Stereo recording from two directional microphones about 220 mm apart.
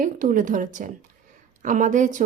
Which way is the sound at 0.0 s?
35° right (ahead or behind).